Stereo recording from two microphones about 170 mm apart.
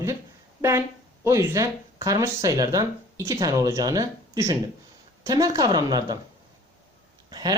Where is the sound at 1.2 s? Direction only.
15° right (ahead or behind).